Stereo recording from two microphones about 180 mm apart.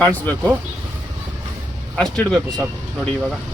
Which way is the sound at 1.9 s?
5° left (ahead or behind).